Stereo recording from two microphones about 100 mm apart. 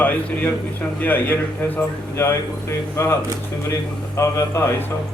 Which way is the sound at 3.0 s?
25° left (ahead or behind).